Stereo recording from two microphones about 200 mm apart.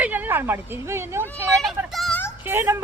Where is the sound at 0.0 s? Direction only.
10° right (ahead or behind).